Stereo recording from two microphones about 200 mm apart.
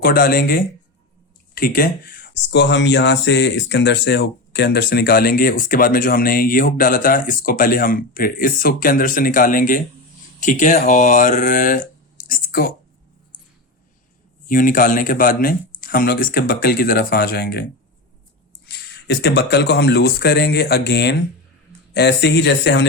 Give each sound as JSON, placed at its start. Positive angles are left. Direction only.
{"t": 0.0, "sound": "speech", "side_deg": 50}
{"t": 14.4, "sound": "speech", "side_deg": 45}